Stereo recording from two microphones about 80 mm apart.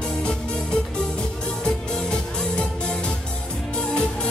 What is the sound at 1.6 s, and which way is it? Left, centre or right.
Music, centre.